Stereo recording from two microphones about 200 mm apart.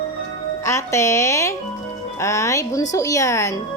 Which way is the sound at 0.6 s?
15° left (ahead or behind).